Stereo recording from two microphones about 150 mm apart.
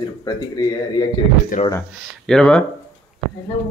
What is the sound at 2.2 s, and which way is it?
Speech, 5° left (ahead or behind).